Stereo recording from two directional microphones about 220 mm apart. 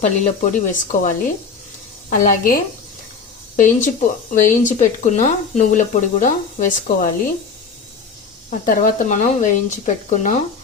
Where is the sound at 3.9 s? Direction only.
35° left (ahead or behind).